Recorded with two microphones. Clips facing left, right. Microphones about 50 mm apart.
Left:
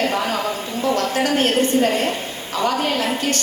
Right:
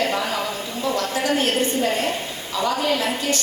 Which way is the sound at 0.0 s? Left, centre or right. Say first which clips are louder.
Left 2 dB; left.